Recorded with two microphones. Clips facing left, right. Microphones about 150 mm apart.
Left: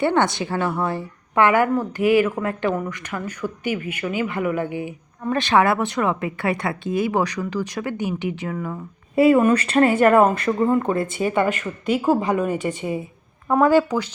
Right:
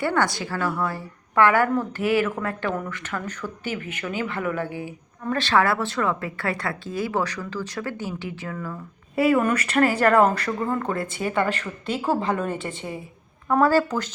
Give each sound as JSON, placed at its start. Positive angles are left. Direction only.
{"t": 0.0, "sound": "a woman's voice", "side_deg": 25}